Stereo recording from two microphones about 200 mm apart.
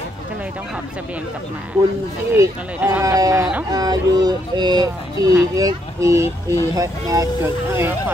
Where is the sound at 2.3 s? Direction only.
10° right (ahead or behind).